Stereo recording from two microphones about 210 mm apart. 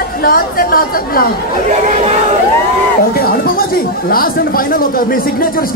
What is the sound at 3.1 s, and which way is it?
Speech, 45° left (ahead or behind).